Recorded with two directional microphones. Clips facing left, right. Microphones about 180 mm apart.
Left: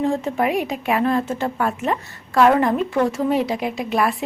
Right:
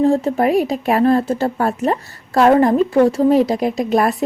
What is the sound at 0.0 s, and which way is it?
Speech, 35° right (ahead or behind).